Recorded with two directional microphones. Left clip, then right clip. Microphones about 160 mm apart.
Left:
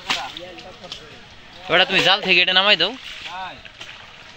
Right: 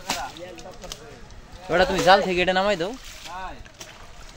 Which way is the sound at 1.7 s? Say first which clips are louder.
Left 1 dB; 5° right (ahead or behind).